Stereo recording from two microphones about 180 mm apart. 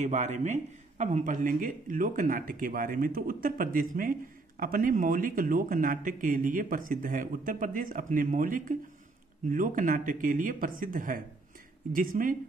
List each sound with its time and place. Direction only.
0.0 s speech: 40° right (ahead or behind)